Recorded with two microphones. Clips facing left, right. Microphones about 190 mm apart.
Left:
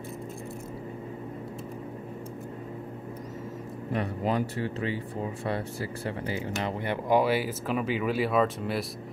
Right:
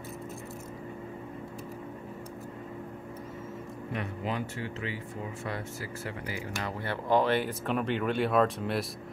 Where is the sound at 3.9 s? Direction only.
35° left (ahead or behind).